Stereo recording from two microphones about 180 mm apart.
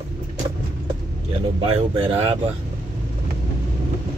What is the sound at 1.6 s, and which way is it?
Speech, 30° right (ahead or behind).